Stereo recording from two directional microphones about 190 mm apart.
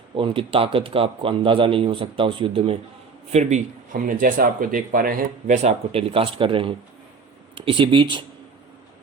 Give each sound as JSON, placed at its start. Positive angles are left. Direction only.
{"t": 0.2, "sound": "a man's voice", "side_deg": -30}
{"t": 3.3, "sound": "a man's voice", "side_deg": -40}